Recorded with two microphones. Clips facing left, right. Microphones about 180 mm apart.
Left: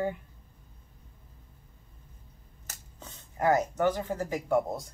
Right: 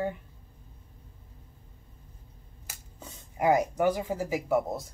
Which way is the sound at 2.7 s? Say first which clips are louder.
Right 1 dB; 10° right (ahead or behind).